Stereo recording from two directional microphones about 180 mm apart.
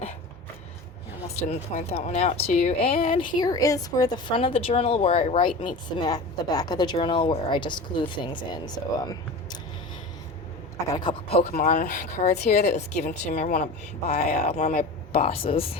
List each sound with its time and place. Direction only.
1.4 s speech: 35° left (ahead or behind)
3.1 s a woman's voice: 25° left (ahead or behind)
10.9 s a woman's voice: 25° left (ahead or behind)
11.5 s speech: 45° left (ahead or behind)
15.1 s speech: 35° left (ahead or behind)